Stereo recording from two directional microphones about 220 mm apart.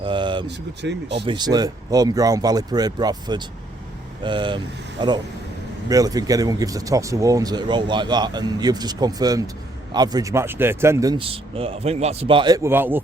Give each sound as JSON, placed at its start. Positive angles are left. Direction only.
{"t": 0.0, "sound": "a sound", "side_deg": -20}
{"t": 0.4, "sound": "speech", "side_deg": -50}
{"t": 1.2, "sound": "speech", "side_deg": -20}